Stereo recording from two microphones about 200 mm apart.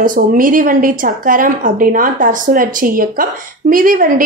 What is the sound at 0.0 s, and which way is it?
A woman's voice, 45° right (ahead or behind).